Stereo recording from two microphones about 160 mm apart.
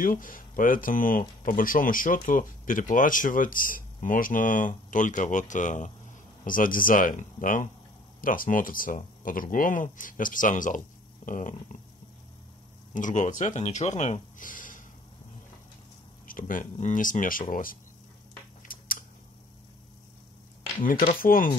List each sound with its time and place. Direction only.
0.0 s speech: 55° left (ahead or behind)
12.9 s speech: 55° left (ahead or behind)
16.3 s speech: 60° left (ahead or behind)
18.7 s a sound: 60° left (ahead or behind)
20.8 s speech: 60° left (ahead or behind)